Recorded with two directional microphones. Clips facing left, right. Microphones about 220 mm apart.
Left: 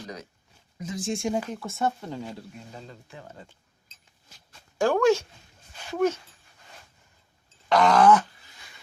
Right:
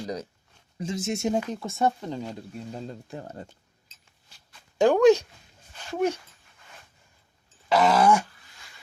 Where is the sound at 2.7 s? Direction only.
40° right (ahead or behind).